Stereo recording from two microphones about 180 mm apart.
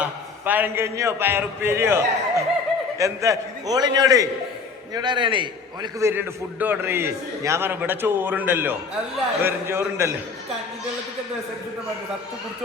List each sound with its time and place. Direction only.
0.0 s a man's voice: 10° right (ahead or behind)